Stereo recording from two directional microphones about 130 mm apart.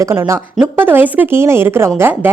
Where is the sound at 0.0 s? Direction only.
20° right (ahead or behind).